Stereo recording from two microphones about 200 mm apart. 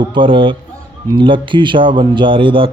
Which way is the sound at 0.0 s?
25° right (ahead or behind).